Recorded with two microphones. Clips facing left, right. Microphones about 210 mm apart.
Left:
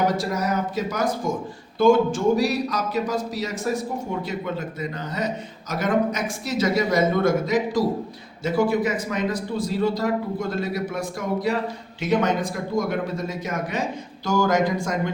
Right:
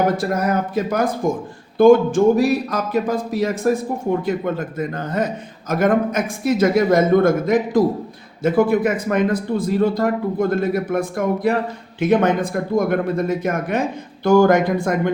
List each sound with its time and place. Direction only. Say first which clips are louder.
0.1 s a man's voice: right 5 dB; 55° right (ahead or behind)